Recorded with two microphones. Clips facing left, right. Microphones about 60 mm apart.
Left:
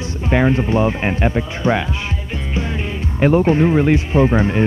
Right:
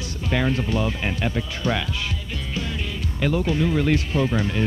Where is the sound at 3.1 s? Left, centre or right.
Left.